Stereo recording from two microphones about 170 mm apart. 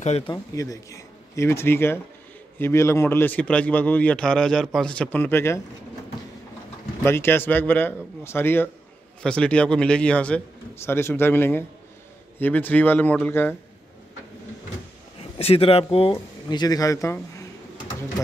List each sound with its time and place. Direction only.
0.3 s a man's voice: 20° left (ahead or behind)
7.0 s a man's voice: 15° left (ahead or behind)
15.3 s speech: 35° left (ahead or behind); by 17.5 s 20° left (ahead or behind)